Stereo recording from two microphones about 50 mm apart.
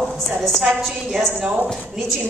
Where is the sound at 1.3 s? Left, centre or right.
Right.